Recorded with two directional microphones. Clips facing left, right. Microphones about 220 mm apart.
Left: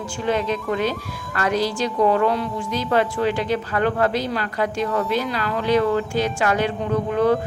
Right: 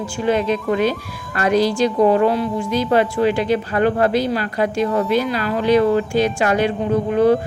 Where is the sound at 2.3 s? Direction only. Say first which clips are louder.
Right 5 dB; 5° right (ahead or behind).